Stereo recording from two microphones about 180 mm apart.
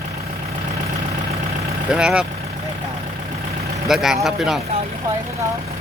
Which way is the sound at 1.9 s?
5° right (ahead or behind).